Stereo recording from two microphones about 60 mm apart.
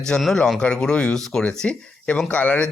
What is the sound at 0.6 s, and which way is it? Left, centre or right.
Speech, centre.